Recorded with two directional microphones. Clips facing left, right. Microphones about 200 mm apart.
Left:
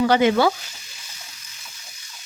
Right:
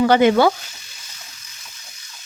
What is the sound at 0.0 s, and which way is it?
Frying, 55° right (ahead or behind).